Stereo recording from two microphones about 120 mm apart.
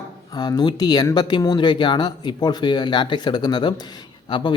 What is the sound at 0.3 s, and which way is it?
Speech, 35° left (ahead or behind).